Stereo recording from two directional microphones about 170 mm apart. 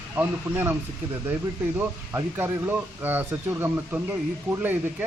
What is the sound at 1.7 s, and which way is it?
Speech, 15° right (ahead or behind).